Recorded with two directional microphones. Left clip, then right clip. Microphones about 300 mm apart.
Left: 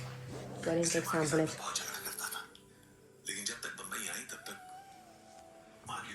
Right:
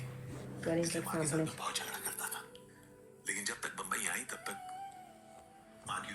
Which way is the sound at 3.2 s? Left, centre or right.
Centre.